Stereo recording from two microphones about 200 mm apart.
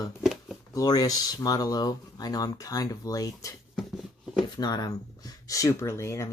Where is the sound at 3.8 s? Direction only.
Centre (ahead or behind).